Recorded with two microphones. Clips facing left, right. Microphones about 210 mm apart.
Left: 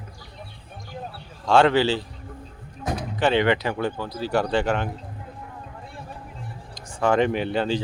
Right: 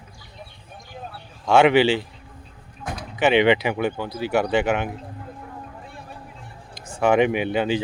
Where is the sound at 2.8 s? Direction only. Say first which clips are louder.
Left 4 dB; 40° left (ahead or behind).